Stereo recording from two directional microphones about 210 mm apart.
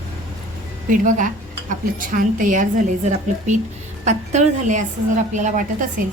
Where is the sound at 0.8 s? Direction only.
40° right (ahead or behind).